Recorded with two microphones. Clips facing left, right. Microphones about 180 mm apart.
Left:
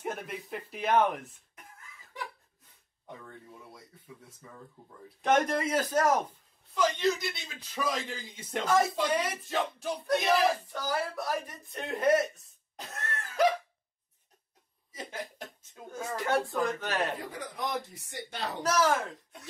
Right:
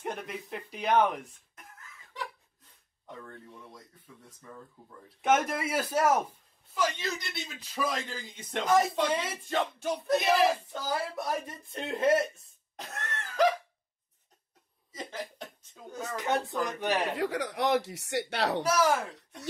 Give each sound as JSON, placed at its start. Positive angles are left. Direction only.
{"t": 0.0, "sound": "speech", "side_deg": 5}
{"t": 3.1, "sound": "speech", "side_deg": 10}
{"t": 5.2, "sound": "a man's voice", "side_deg": -5}
{"t": 8.1, "sound": "speech", "side_deg": 10}
{"t": 8.6, "sound": "a man's voice", "side_deg": -15}
{"t": 9.5, "sound": "speech", "side_deg": 0}
{"t": 10.7, "sound": "speech", "side_deg": -20}
{"t": 12.7, "sound": "cough", "side_deg": 0}
{"t": 14.9, "sound": "speech", "side_deg": 10}
{"t": 15.9, "sound": "speech", "side_deg": -20}
{"t": 17.2, "sound": "speech", "side_deg": -80}
{"t": 18.6, "sound": "a man's voice", "side_deg": -10}